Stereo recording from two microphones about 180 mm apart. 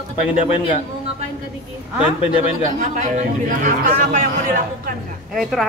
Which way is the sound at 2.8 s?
45° right (ahead or behind).